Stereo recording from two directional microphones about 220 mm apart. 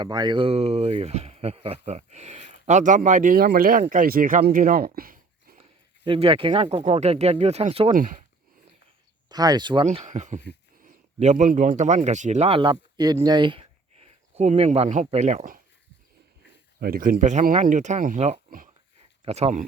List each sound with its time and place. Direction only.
0.0 s speech: 20° right (ahead or behind); by 5.6 s 40° right (ahead or behind)
6.1 s speech: 25° right (ahead or behind)
7.9 s speech: 35° right (ahead or behind)
9.3 s a man's voice: 20° right (ahead or behind); by 15.6 s 35° right (ahead or behind)
16.8 s speech: 40° right (ahead or behind)